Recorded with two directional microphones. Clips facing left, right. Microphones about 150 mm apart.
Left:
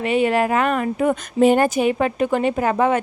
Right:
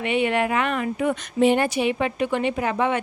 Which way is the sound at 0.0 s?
40° left (ahead or behind).